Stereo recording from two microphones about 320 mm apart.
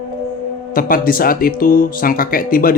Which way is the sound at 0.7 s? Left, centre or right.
Left.